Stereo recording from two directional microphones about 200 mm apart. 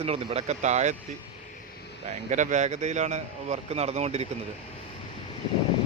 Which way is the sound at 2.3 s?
35° right (ahead or behind).